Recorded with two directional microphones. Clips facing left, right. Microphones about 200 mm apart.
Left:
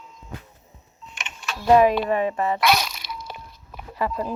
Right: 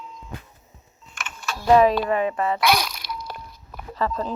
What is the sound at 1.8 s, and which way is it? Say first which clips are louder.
Speech: even; 20° left (ahead or behind).